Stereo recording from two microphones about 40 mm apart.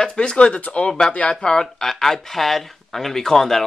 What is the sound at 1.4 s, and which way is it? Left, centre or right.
Speech, centre.